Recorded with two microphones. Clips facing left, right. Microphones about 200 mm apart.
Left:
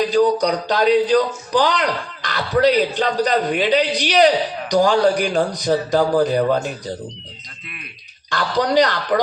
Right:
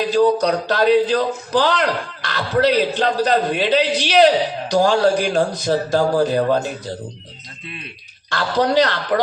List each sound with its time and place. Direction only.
0.1 s a man's voice: 15° left (ahead or behind)
8.3 s a man's voice: 15° left (ahead or behind)